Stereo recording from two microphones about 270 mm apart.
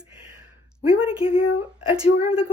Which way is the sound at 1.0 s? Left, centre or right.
Left.